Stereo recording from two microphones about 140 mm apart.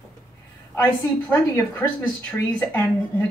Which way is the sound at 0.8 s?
15° left (ahead or behind).